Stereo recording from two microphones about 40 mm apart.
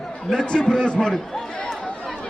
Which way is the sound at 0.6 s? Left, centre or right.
Left.